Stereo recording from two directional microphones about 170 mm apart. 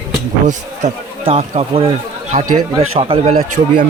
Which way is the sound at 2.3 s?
50° right (ahead or behind).